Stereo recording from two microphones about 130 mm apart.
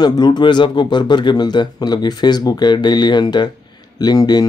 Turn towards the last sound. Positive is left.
turn(degrees=30)  # may be behind; listen again after turning